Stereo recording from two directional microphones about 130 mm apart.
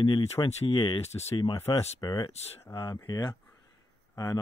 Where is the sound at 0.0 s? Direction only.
40° left (ahead or behind).